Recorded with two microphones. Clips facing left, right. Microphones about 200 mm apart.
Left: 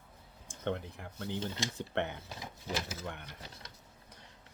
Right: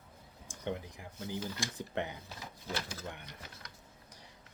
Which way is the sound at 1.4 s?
25° left (ahead or behind).